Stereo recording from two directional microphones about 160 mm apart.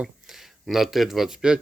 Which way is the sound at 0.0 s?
Centre (ahead or behind).